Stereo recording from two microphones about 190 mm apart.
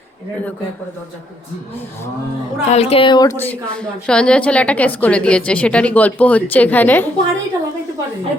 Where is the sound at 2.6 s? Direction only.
35° left (ahead or behind); by 7.0 s 10° left (ahead or behind).